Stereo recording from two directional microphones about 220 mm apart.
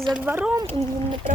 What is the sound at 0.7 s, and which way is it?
Speech, 25° right (ahead or behind).